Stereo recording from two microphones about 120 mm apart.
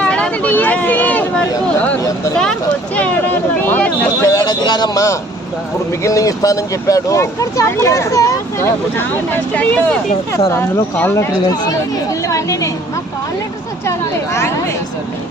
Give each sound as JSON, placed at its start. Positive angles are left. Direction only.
{"t": 0.0, "sound": "vehicle", "side_deg": 10}
{"t": 2.4, "sound": "speech", "side_deg": 10}
{"t": 4.3, "sound": "speech", "side_deg": 30}
{"t": 11.4, "sound": "speech", "side_deg": 30}